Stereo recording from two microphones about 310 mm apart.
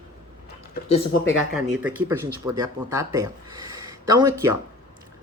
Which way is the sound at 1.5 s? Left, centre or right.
Centre.